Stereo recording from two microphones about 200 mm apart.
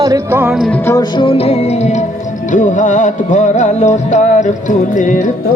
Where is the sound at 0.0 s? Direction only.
15° right (ahead or behind).